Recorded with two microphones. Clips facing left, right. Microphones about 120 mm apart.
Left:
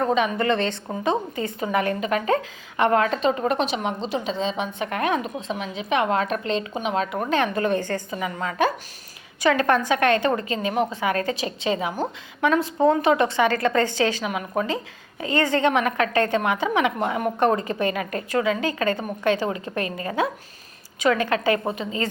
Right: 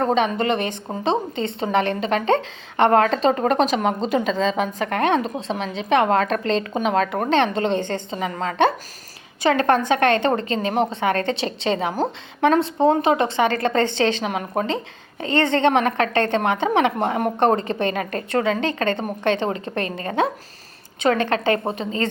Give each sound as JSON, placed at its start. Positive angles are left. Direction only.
{"t": 0.0, "sound": "a woman's voice", "side_deg": -35}
{"t": 0.4, "sound": "a woman's voice", "side_deg": -15}
{"t": 7.3, "sound": "a woman's voice", "side_deg": -30}
{"t": 8.3, "sound": "a woman's voice", "side_deg": -40}
{"t": 9.4, "sound": "a woman's voice", "side_deg": -25}
{"t": 18.3, "sound": "a woman's voice", "side_deg": -45}
{"t": 18.6, "sound": "a woman's voice", "side_deg": -30}